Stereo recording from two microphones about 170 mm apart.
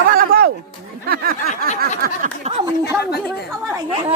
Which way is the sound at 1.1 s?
60° right (ahead or behind).